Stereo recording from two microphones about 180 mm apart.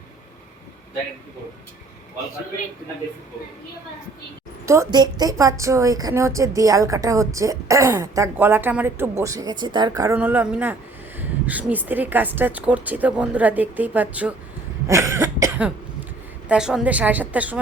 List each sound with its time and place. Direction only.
4.6 s a woman's voice: 15° right (ahead or behind)
10.2 s a woman's voice: 10° right (ahead or behind)
14.8 s cough: 15° right (ahead or behind)
16.5 s a woman's voice: 5° right (ahead or behind)